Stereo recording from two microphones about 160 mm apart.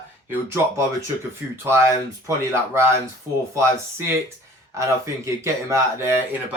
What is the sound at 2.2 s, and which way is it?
Speech, 15° right (ahead or behind).